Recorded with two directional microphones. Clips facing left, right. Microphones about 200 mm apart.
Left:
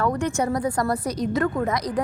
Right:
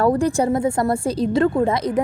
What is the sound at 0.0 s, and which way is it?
A woman's voice, 35° right (ahead or behind).